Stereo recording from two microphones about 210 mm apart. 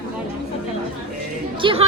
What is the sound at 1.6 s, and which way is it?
Speech, 25° right (ahead or behind).